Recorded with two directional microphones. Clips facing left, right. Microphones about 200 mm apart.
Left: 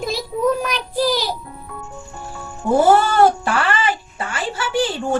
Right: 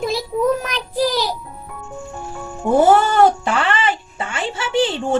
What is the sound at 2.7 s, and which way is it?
Speech, 20° right (ahead or behind).